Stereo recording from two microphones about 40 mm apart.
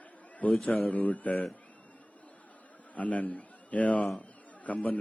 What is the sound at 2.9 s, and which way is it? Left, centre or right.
A man's voice, left.